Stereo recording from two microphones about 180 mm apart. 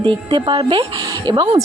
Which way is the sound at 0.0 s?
25° right (ahead or behind).